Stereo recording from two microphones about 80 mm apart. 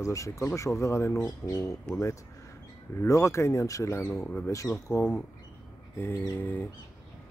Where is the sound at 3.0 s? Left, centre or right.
Left.